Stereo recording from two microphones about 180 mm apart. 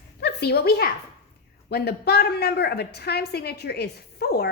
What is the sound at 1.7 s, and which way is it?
A woman's voice, 65° left (ahead or behind).